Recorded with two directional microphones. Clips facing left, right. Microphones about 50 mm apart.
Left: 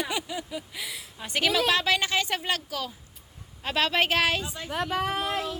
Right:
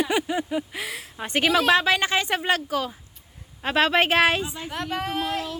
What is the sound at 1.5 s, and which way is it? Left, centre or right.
A woman's voice, right.